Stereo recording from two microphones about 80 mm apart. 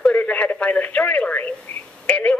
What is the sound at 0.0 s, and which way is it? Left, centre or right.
Radio, centre.